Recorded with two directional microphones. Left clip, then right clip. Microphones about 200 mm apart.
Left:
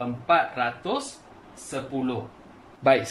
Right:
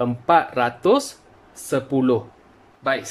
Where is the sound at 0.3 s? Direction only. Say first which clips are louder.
Right 4 dB; 40° right (ahead or behind).